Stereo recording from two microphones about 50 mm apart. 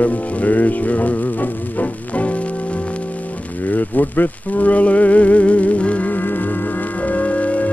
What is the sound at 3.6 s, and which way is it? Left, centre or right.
Music, left.